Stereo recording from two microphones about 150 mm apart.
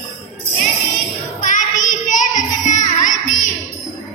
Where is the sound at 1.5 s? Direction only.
55° left (ahead or behind).